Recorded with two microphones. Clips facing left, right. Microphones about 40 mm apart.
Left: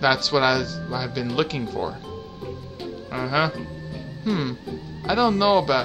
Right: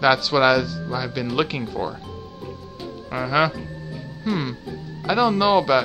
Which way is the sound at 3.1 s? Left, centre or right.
Centre.